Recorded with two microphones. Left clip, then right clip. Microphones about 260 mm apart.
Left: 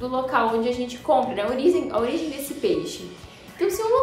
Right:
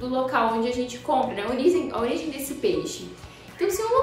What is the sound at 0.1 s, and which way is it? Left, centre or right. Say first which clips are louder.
A woman's voice: left 1 dB; centre.